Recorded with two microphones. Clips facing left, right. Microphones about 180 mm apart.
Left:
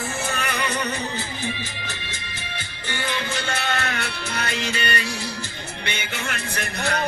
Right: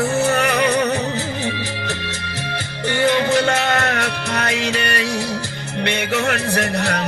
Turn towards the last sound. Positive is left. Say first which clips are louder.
# right 5 dB
turn(degrees=-70)  # may be behind; listen again after turning